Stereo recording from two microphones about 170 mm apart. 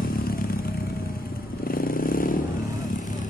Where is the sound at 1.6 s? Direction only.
60° left (ahead or behind).